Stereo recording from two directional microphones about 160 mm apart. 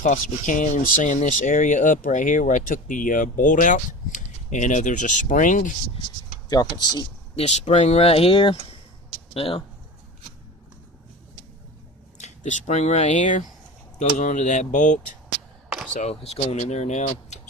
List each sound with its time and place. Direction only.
0.0 s speech: 50° left (ahead or behind)
6.5 s speech: 25° left (ahead or behind)
7.3 s speech: 40° left (ahead or behind)
12.1 s a sound: 45° left (ahead or behind)
12.6 s speech: 45° left (ahead or behind)
16.0 s speech: 45° left (ahead or behind)